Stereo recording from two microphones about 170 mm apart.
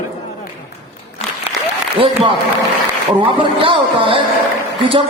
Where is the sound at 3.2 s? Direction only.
30° right (ahead or behind).